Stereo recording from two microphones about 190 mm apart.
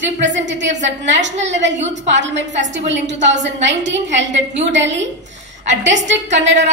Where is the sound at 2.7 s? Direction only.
70° right (ahead or behind).